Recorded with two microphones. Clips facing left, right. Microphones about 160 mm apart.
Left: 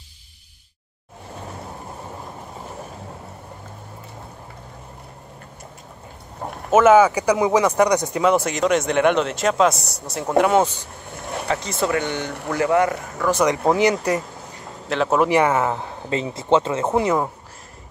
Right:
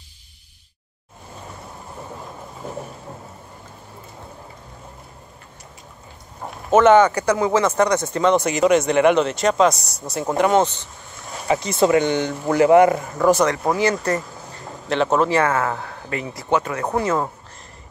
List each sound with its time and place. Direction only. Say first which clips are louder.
6.7 s speech: even; 5° left (ahead or behind)
11.4 s speech: right 6 dB; 10° right (ahead or behind)
13.5 s speech: left 2 dB; 20° left (ahead or behind)
14.9 s speech: right 1 dB; centre (ahead or behind)
15.1 s speech: left 3 dB; 15° left (ahead or behind)